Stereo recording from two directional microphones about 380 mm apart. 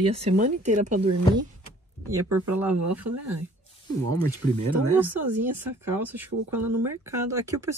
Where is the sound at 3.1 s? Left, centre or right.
Right.